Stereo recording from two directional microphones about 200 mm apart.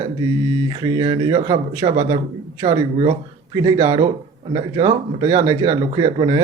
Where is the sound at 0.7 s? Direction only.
25° right (ahead or behind).